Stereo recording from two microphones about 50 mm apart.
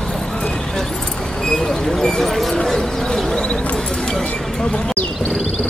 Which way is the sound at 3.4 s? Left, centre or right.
Centre.